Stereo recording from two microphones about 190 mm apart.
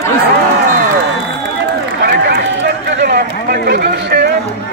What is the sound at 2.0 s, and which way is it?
Run, 55° right (ahead or behind).